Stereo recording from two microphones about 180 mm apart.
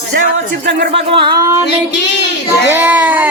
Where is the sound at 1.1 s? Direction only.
20° right (ahead or behind).